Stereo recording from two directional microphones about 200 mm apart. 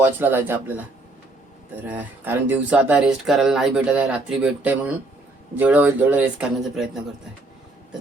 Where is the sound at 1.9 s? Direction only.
10° right (ahead or behind).